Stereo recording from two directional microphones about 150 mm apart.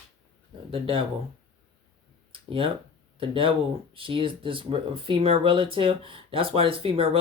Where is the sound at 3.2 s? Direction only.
35° right (ahead or behind).